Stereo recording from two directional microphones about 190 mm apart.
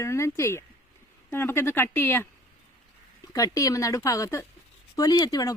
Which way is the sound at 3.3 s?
15° left (ahead or behind).